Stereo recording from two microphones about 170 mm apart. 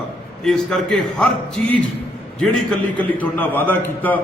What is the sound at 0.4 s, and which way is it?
A man's voice, 5° left (ahead or behind).